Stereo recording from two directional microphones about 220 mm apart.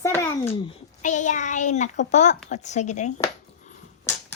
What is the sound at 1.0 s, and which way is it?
Speech, 35° left (ahead or behind).